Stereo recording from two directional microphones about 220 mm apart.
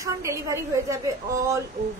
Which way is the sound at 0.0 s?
15° right (ahead or behind).